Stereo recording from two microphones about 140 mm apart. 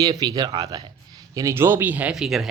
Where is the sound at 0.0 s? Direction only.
30° right (ahead or behind).